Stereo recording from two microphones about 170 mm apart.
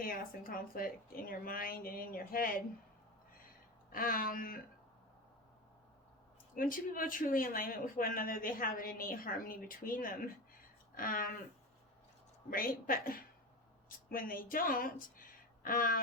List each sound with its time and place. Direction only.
0.0 s speech: 55° left (ahead or behind)
3.9 s speech: 55° left (ahead or behind)
6.6 s speech: 55° left (ahead or behind)
12.5 s speech: 55° left (ahead or behind)